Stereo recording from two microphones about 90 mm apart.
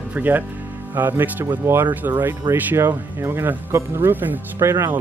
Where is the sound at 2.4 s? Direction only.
60° right (ahead or behind).